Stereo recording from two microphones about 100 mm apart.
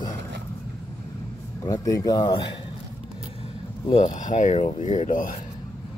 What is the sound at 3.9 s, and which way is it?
Speech, 65° left (ahead or behind).